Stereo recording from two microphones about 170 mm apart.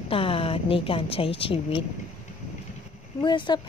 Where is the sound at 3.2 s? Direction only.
30° left (ahead or behind).